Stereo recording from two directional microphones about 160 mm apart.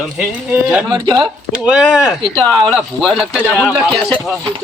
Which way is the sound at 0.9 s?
25° right (ahead or behind).